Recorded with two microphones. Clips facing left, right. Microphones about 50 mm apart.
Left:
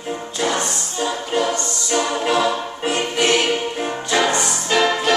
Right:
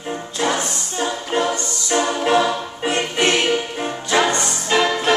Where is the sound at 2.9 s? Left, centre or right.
Right.